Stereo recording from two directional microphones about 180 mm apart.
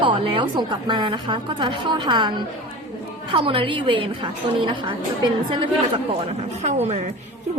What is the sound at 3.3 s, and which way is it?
A woman's voice, 30° right (ahead or behind).